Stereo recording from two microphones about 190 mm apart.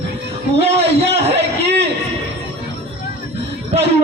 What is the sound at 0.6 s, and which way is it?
Speech, 35° right (ahead or behind).